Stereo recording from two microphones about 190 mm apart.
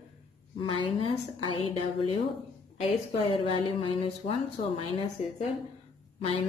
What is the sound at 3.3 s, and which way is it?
Speech, 25° left (ahead or behind).